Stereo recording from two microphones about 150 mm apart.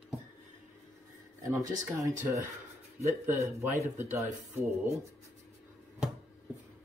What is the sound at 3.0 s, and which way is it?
Speech, 20° right (ahead or behind).